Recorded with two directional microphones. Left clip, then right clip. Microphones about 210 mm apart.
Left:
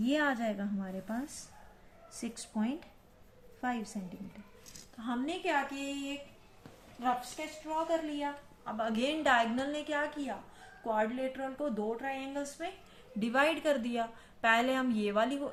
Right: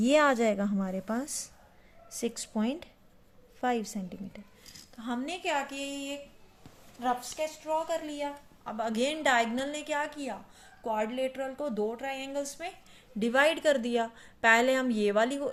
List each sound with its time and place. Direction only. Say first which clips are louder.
0.0 s a woman's voice: right 8 dB; 55° right (ahead or behind)
4.9 s a woman's voice: right 1 dB; 45° right (ahead or behind)
7.0 s a woman's voice: right 3 dB; 55° right (ahead or behind); by 15.5 s 40° right (ahead or behind)